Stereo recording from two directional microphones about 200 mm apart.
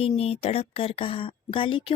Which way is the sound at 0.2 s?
30° left (ahead or behind).